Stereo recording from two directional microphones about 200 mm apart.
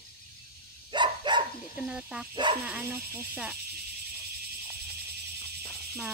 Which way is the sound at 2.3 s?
20° right (ahead or behind).